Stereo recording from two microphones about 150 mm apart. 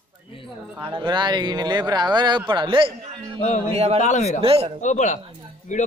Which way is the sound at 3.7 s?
45° right (ahead or behind).